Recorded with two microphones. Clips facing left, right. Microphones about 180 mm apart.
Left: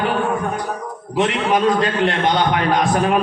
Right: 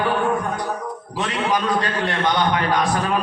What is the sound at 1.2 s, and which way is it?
A man's voice, 20° left (ahead or behind).